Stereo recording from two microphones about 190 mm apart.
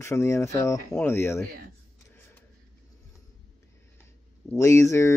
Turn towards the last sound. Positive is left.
turn(degrees=15)  # may be behind; listen again after turning